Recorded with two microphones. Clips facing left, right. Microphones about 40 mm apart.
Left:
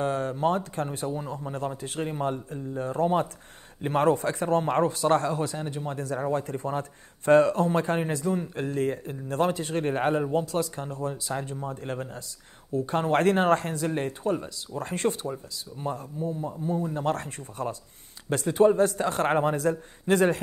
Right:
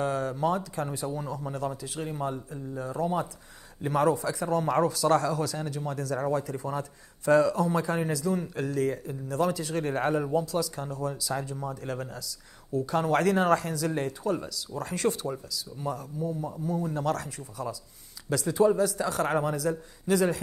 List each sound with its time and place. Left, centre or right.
0.0 s speech: left
0.9 s a man's voice: left
6.3 s a man's voice: left